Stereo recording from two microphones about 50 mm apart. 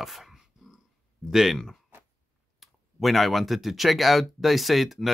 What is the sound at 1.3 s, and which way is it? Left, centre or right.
Speech, centre.